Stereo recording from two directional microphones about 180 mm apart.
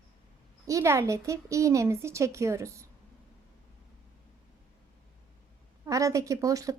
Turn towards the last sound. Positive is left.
turn(degrees=-20)  # may be behind; listen again after turning